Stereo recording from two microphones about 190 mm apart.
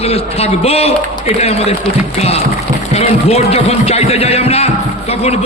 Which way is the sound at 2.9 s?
35° left (ahead or behind).